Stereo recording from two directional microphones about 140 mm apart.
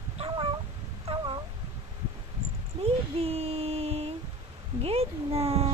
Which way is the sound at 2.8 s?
45° right (ahead or behind).